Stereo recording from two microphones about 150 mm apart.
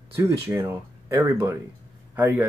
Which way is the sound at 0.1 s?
20° right (ahead or behind).